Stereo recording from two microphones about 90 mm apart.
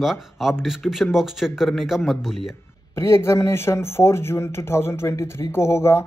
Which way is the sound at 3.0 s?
30° left (ahead or behind).